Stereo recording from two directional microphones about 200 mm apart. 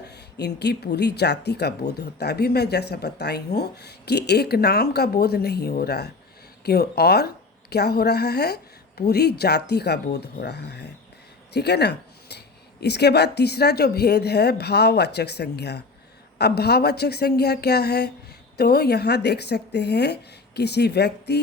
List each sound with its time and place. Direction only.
0.1 s speech: 55° left (ahead or behind)